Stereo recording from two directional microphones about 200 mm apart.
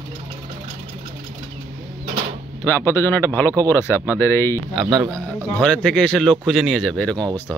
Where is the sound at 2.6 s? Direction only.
10° left (ahead or behind).